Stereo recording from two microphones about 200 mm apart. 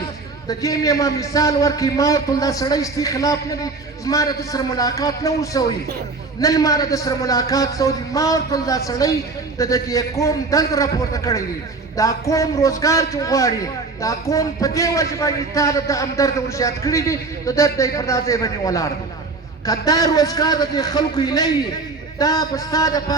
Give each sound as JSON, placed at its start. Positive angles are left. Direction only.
{"t": 0.4, "sound": "a man's voice", "side_deg": 15}